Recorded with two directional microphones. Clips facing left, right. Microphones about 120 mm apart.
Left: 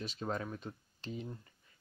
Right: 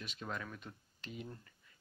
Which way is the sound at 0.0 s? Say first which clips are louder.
Left 6 dB; 35° left (ahead or behind).